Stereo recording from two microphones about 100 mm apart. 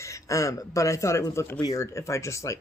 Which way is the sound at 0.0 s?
30° left (ahead or behind).